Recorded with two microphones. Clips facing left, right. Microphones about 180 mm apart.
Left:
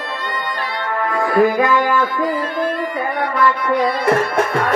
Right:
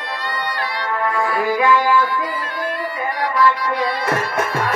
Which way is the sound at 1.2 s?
45° left (ahead or behind).